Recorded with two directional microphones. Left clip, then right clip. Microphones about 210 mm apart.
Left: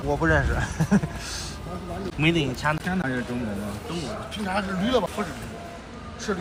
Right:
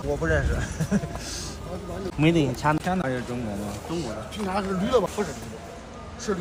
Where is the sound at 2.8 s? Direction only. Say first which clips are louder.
Right 2 dB; 40° right (ahead or behind).